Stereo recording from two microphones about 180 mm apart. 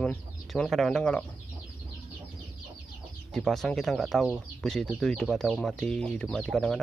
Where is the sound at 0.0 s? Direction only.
5° left (ahead or behind).